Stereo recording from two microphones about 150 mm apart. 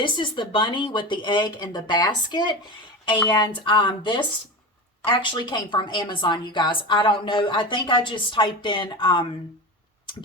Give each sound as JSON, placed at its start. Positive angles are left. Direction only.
{"t": 0.0, "sound": "a woman's voice", "side_deg": 30}